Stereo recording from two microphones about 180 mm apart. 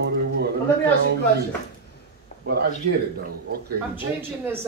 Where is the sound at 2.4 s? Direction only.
65° right (ahead or behind).